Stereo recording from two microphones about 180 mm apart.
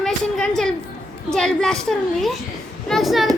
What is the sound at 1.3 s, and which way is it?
A woman's voice, 5° left (ahead or behind).